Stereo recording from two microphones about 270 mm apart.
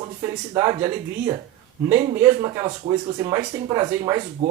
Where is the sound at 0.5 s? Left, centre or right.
Centre.